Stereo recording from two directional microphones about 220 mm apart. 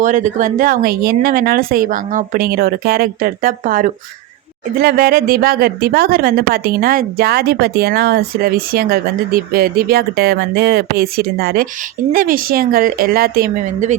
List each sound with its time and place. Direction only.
0.0 s a woman's voice: 35° right (ahead or behind)